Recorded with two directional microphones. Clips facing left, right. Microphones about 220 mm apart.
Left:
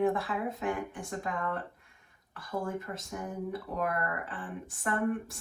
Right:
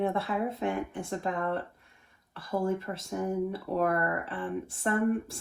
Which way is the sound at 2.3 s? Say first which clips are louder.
Right 5 dB; 25° right (ahead or behind).